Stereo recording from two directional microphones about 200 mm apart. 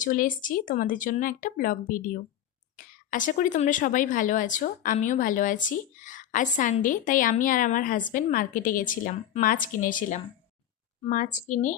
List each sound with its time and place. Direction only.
0.0 s a woman's voice: 40° left (ahead or behind)